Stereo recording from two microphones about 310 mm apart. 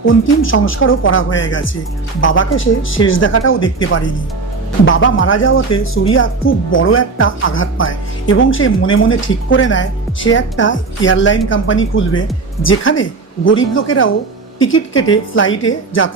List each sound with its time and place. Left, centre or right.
0.0 s speech: left